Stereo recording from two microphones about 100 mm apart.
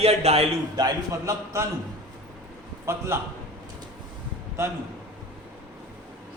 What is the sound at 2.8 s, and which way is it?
Speech, 25° right (ahead or behind).